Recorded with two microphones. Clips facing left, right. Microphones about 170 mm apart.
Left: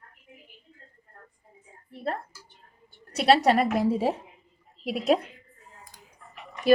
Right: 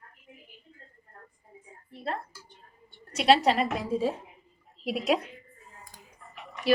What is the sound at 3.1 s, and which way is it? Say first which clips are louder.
A woman's voice: left 2 dB; 60° left (ahead or behind).